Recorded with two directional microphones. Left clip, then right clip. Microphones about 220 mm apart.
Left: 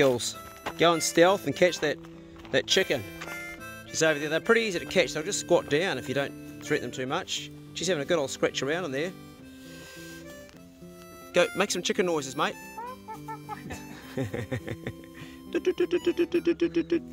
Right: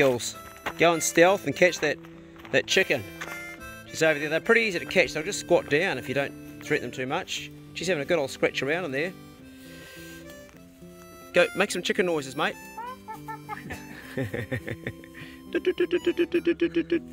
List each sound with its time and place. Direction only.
0.0 s speech: centre (ahead or behind)
11.3 s speech: centre (ahead or behind)